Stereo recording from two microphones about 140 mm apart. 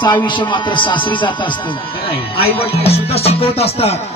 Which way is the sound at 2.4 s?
45° left (ahead or behind).